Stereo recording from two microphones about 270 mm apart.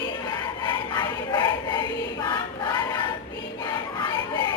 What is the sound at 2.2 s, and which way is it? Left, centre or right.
Choir, centre.